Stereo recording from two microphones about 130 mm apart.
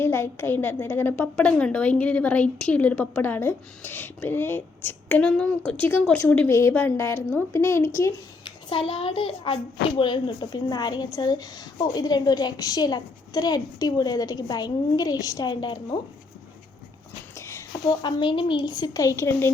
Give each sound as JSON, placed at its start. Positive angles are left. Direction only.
{"t": 0.0, "sound": "a woman's voice", "side_deg": 15}
{"t": 8.9, "sound": "a child's voice", "side_deg": 45}
{"t": 17.3, "sound": "a sound", "side_deg": 20}
{"t": 18.0, "sound": "a woman's voice", "side_deg": 40}